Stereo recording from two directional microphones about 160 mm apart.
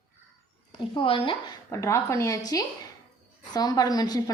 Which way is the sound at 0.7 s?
30° left (ahead or behind).